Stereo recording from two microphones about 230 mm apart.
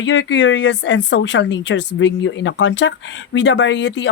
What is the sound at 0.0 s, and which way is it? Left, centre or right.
Speech, left.